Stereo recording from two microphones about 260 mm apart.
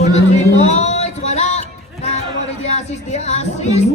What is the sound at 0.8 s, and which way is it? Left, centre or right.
Music, left.